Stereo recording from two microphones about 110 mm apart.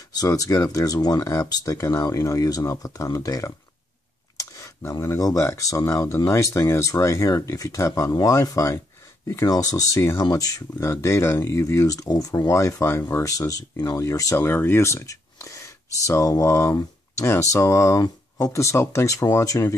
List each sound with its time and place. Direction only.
0.1 s speech: 35° left (ahead or behind)